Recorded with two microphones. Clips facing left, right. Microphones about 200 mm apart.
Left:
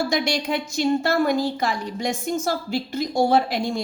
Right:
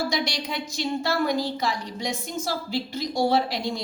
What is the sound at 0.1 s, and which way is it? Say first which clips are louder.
A woman's voice: left 5 dB; 50° left (ahead or behind).